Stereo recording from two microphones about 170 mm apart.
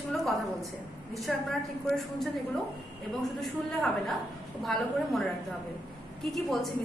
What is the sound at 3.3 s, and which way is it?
A woman's voice, centre (ahead or behind).